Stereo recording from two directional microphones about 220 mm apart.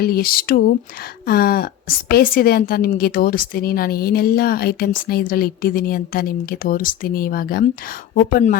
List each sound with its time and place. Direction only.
0.0 s a woman's voice: 40° left (ahead or behind)